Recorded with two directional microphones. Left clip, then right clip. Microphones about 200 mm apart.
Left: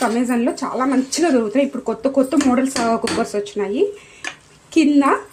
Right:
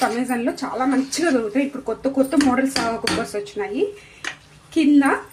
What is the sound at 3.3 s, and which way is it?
Speech, 40° left (ahead or behind).